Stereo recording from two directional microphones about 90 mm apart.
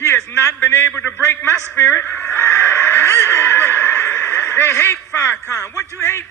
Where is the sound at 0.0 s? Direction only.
30° left (ahead or behind).